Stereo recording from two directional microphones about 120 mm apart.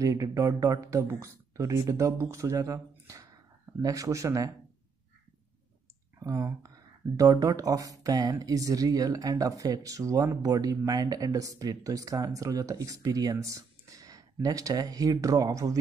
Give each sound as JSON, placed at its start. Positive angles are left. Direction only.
{"t": 0.0, "sound": "speech", "side_deg": -25}
{"t": 6.1, "sound": "speech", "side_deg": -25}